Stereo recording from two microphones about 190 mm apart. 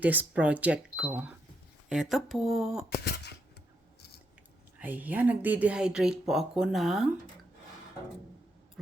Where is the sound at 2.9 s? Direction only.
60° left (ahead or behind).